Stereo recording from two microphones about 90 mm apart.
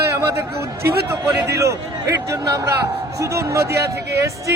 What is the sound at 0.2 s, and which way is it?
A man's voice, 30° right (ahead or behind).